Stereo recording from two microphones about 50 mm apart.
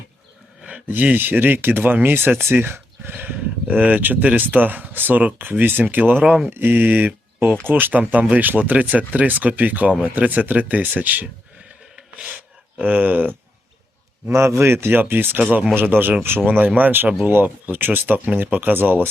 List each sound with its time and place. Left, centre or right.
0.9 s speech: right
6.2 s speech: right
6.6 s speech: right
8.4 s speech: right
12.8 s speech: right
14.3 s a man's voice: right